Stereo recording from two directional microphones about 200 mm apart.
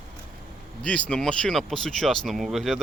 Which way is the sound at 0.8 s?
5° left (ahead or behind).